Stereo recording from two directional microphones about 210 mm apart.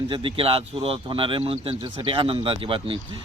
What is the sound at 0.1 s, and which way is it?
Speech, 25° right (ahead or behind).